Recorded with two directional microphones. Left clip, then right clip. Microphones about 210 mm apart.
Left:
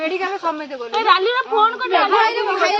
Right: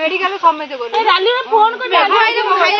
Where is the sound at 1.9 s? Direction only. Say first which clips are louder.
Right 4 dB; 50° left (ahead or behind).